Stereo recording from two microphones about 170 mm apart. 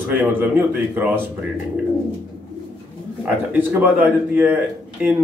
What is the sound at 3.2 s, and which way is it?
Speech, 10° right (ahead or behind).